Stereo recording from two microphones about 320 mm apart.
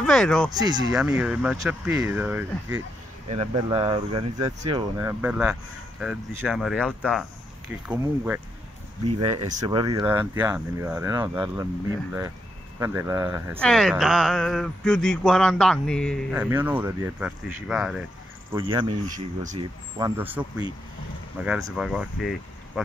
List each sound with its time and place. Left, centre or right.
0.0 s speech: centre
0.5 s speech: centre
9.2 s speech: centre
18.5 s speech: centre
20.0 s speech: centre